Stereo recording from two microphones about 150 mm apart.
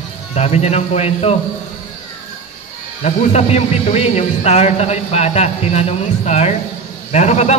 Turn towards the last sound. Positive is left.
turn(degrees=50)  # may be behind; listen again after turning